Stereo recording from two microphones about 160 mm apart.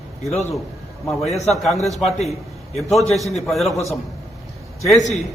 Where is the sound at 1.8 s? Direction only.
Centre (ahead or behind).